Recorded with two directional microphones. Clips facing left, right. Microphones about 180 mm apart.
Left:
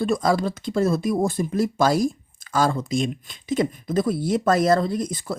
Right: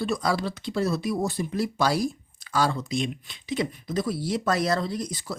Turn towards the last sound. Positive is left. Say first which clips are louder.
# left 5 dB
turn(degrees=50)  # may be behind; listen again after turning